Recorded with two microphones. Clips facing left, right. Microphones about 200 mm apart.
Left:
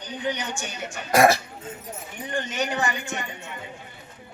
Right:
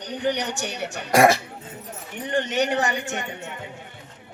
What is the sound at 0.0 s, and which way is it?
A man's voice, 70° right (ahead or behind).